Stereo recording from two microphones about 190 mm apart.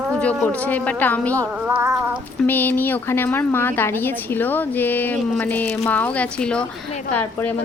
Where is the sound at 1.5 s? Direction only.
10° right (ahead or behind).